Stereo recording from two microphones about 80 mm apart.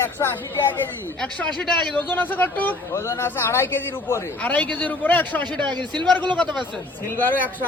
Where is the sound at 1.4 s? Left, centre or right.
Centre.